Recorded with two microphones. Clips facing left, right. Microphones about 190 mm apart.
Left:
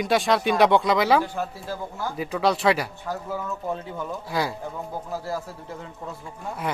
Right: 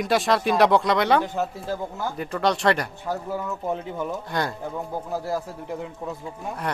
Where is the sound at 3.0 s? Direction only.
15° right (ahead or behind).